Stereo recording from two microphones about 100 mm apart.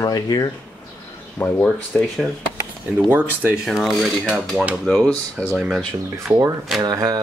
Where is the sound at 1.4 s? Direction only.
20° left (ahead or behind).